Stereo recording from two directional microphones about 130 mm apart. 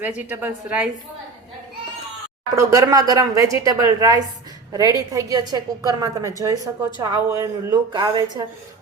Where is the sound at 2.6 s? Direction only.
25° right (ahead or behind).